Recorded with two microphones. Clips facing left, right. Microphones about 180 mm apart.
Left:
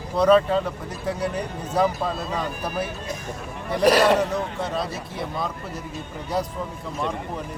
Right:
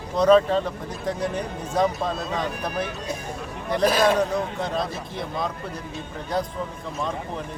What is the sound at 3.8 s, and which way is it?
Speech, 70° left (ahead or behind).